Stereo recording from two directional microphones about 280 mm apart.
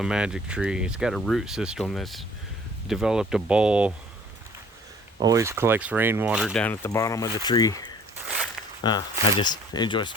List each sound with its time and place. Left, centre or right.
0.0 s speech: centre
5.2 s speech: centre
8.8 s speech: centre